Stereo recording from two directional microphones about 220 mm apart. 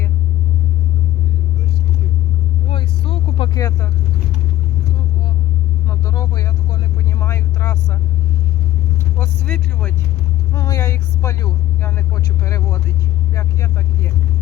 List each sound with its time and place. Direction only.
2.6 s vehicle: 25° left (ahead or behind)
5.9 s vehicle: 15° left (ahead or behind)
9.2 s speech: 5° left (ahead or behind)
10.5 s vehicle: 15° left (ahead or behind)
11.8 s speech: 10° left (ahead or behind)